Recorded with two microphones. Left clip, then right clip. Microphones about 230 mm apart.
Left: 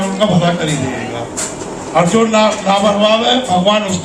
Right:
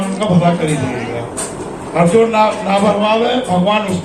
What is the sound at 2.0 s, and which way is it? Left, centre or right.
A man's voice, left.